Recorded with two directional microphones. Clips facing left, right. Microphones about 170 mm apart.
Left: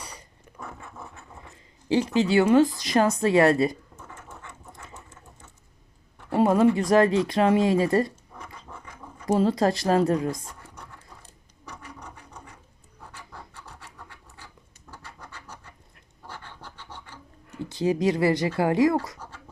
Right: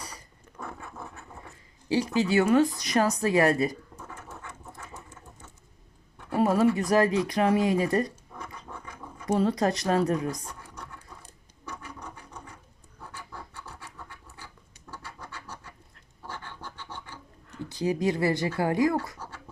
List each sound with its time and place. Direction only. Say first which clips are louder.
1.9 s speech: left 3 dB; 25° left (ahead or behind)
6.3 s speech: left 3 dB; 25° left (ahead or behind)
9.2 s speech: left 3 dB; 25° left (ahead or behind)
17.5 s speech: left 3 dB; 20° left (ahead or behind)